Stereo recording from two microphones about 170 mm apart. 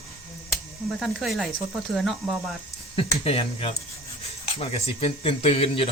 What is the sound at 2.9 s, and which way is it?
Speech, 35° left (ahead or behind).